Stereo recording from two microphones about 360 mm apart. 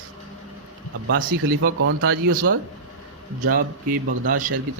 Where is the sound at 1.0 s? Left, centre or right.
Right.